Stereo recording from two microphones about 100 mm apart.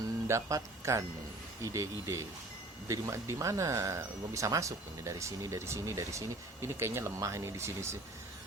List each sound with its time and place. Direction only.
0.3 s speech: 30° right (ahead or behind)